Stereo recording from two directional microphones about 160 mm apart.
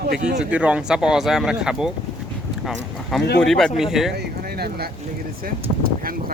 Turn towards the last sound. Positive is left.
turn(degrees=-65)  # may be behind; listen again after turning